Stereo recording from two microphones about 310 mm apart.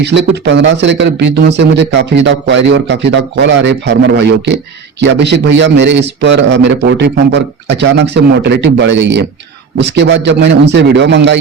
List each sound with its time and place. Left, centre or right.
0.0 s speech: right